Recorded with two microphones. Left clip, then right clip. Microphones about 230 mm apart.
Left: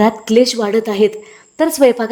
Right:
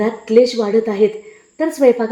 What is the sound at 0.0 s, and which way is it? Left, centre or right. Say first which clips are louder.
A woman's voice: left 1 dB; left.